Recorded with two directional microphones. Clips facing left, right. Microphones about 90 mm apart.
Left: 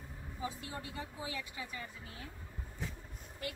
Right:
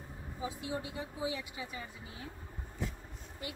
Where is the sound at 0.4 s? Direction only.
15° right (ahead or behind).